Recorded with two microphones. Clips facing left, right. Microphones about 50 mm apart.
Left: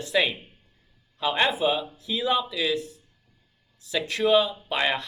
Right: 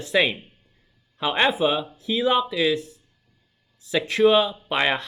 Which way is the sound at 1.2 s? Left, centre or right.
Right.